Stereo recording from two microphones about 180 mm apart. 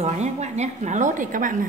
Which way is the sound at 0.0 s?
40° right (ahead or behind).